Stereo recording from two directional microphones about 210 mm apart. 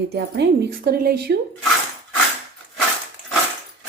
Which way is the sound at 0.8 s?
45° right (ahead or behind).